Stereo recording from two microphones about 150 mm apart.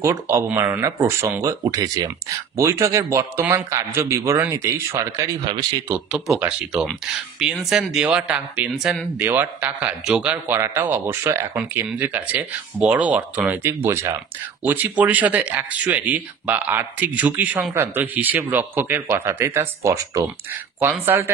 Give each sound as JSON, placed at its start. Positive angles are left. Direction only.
{"t": 0.0, "sound": "speech", "side_deg": -20}
{"t": 5.9, "sound": "speech", "side_deg": -10}